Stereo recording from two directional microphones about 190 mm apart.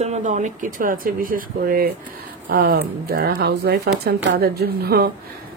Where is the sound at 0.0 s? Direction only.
35° right (ahead or behind).